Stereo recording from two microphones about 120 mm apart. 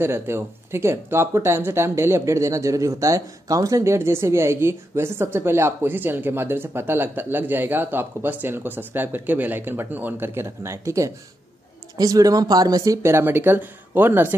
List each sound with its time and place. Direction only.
0.0 s speech: 20° right (ahead or behind)